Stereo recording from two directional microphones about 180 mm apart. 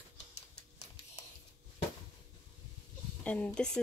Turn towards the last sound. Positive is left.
turn(degrees=5)  # may be behind; listen again after turning